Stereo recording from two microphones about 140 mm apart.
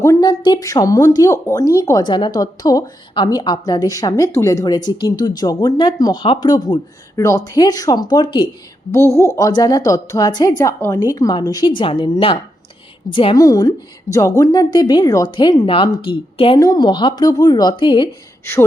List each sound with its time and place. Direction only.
0.0 s speech: 25° left (ahead or behind)
8.9 s a woman's voice: 20° left (ahead or behind)
13.4 s speech: 25° left (ahead or behind)
16.6 s a woman's voice: 25° left (ahead or behind)